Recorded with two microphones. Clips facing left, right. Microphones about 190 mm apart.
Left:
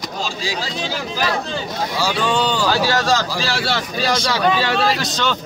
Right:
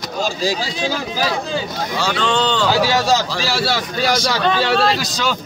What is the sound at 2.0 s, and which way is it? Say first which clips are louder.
Speech: right 1 dB; 10° left (ahead or behind).